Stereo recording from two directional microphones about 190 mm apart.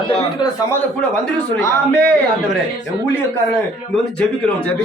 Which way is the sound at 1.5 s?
15° left (ahead or behind).